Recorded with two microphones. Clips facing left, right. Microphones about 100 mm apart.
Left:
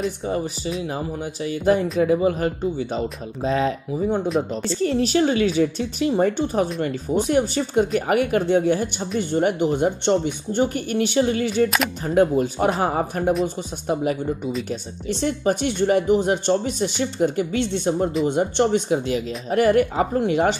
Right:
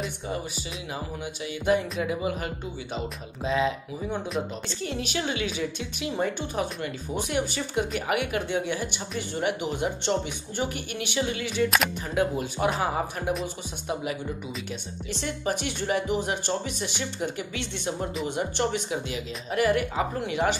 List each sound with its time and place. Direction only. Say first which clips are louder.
0.7 s a woman's voice: left 5 dB; 40° left (ahead or behind)
14.7 s a woman's voice: left 8 dB; 35° left (ahead or behind)